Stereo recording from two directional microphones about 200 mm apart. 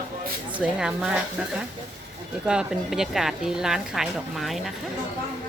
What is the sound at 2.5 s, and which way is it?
Speech, 5° right (ahead or behind).